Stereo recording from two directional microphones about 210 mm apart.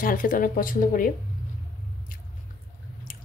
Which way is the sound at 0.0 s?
40° left (ahead or behind).